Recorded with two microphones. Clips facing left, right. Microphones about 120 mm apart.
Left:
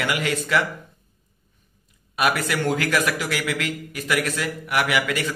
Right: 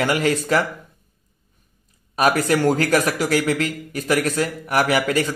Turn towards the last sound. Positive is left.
turn(degrees=-40)  # may be behind; listen again after turning